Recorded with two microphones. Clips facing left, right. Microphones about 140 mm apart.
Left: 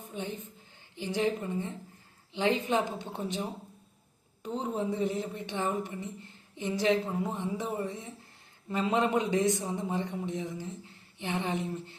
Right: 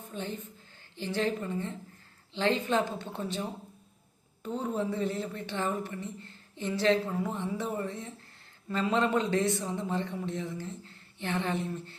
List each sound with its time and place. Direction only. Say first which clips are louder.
0.1 s a woman's voice: even; 15° left (ahead or behind)